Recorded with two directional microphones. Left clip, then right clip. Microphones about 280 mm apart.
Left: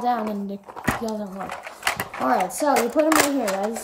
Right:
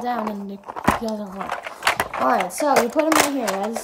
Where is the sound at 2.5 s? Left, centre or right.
Centre.